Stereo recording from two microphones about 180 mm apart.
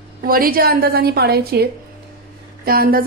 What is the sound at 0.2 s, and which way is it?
A woman's voice, 55° right (ahead or behind).